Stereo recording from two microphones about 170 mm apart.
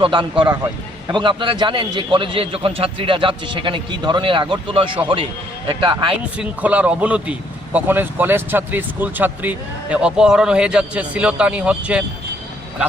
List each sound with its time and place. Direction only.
0.0 s a man's voice: 30° right (ahead or behind)
6.3 s speech: 10° right (ahead or behind)